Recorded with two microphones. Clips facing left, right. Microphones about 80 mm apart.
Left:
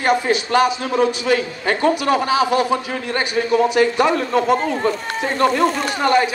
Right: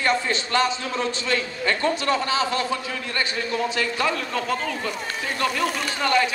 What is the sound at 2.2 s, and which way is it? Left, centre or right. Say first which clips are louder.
Speech: left 7 dB; centre.